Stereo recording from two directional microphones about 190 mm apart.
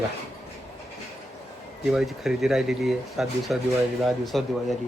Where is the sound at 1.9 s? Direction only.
Centre (ahead or behind).